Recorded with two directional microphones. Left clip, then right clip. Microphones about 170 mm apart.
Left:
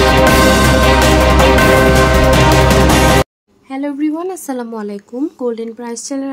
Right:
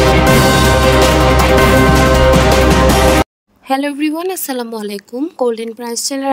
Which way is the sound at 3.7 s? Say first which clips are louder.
Right 3 dB; 50° right (ahead or behind).